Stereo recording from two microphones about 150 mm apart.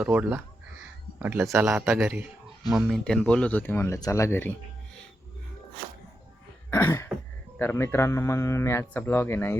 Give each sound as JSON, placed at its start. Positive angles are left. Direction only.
{"t": 0.0, "sound": "a man's voice", "side_deg": -10}
{"t": 3.0, "sound": "speech", "side_deg": 5}
{"t": 6.7, "sound": "cough", "side_deg": 15}
{"t": 7.6, "sound": "speech", "side_deg": 15}